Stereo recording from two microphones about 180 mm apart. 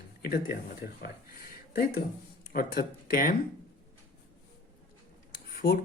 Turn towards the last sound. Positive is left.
turn(degrees=55)  # may be behind; listen again after turning